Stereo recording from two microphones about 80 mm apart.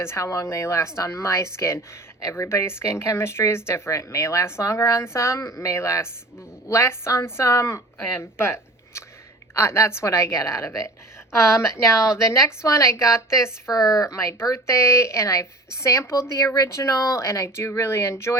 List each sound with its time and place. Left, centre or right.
0.0 s a woman's voice: left
13.7 s speech: left